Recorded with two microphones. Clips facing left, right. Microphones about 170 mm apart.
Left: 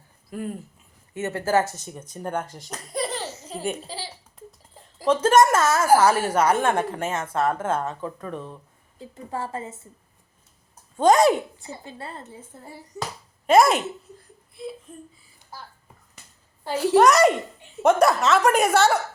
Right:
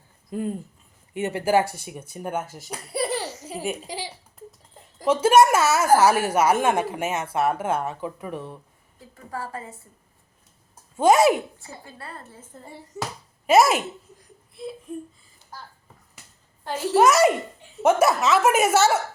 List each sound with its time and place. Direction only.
0.3 s speech: 20° right (ahead or behind); by 3.8 s 5° right (ahead or behind)
3.8 s a sound: 15° right (ahead or behind)
5.0 s a woman's voice: 10° right (ahead or behind)
9.0 s a woman's voice: 25° left (ahead or behind)
10.9 s a woman's voice: 5° right (ahead or behind)
11.6 s a woman's voice: 20° left (ahead or behind)
12.4 s a woman's voice: 5° left (ahead or behind)
16.6 s a child's voice: 10° left (ahead or behind)
17.0 s a woman's voice: centre (ahead or behind)